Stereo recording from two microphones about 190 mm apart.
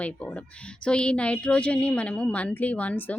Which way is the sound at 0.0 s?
5° left (ahead or behind).